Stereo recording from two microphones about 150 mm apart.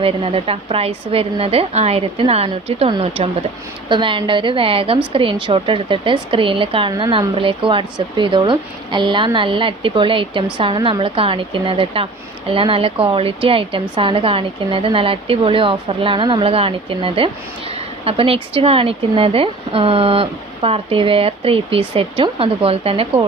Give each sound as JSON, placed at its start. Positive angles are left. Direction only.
{"t": 0.0, "sound": "speech", "side_deg": -40}